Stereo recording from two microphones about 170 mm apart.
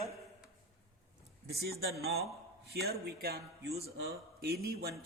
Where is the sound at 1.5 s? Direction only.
70° right (ahead or behind).